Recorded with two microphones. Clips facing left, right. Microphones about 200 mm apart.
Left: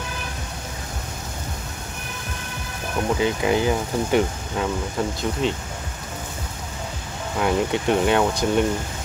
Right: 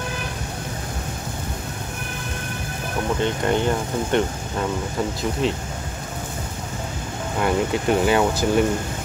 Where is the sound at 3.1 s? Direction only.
5° left (ahead or behind).